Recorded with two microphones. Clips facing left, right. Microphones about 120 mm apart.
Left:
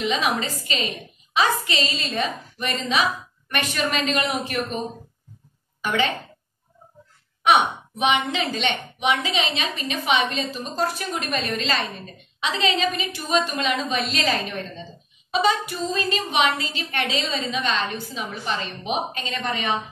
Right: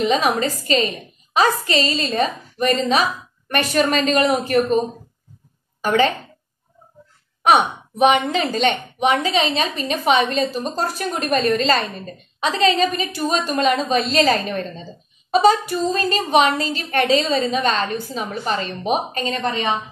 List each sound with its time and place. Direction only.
0.0 s a woman's voice: 40° right (ahead or behind)
7.4 s a woman's voice: 40° right (ahead or behind)